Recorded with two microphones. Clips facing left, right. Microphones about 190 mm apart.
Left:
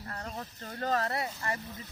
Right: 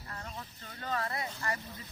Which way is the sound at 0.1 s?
45° left (ahead or behind).